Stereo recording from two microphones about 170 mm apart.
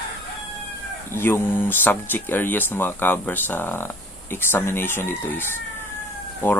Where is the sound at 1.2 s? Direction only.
15° left (ahead or behind).